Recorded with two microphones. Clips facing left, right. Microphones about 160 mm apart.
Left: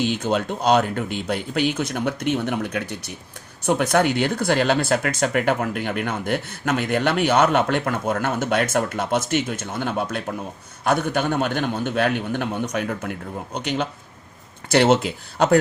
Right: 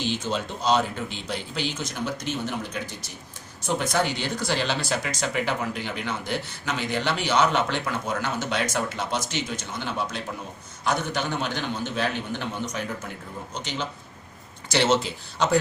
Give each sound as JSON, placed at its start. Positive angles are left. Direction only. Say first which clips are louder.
{"t": 0.2, "sound": "a man's voice", "louder": "left 6 dB", "side_deg": 55}